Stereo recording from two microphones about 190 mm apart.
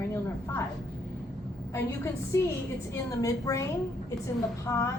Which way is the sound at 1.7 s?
15° left (ahead or behind).